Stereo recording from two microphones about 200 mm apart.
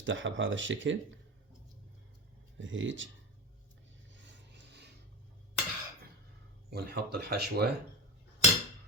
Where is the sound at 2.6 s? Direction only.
70° right (ahead or behind).